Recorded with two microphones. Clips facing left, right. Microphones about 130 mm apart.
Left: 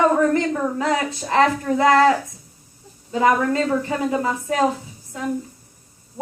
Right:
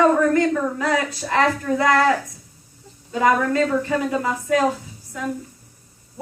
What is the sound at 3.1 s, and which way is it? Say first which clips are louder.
Speech: even; 25° left (ahead or behind).